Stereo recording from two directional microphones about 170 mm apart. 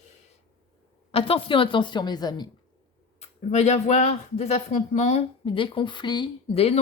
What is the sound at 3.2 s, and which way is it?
Speech, 40° left (ahead or behind).